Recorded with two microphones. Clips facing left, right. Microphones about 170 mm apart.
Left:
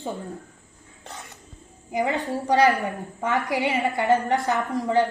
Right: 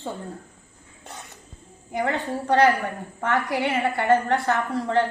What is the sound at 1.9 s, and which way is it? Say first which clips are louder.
A woman's voice: left 1 dB; 20° left (ahead or behind).